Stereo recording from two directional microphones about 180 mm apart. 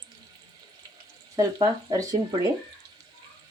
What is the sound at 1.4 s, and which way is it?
Speech, 20° right (ahead or behind).